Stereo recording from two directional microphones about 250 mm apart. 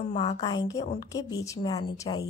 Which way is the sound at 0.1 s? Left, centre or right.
Left.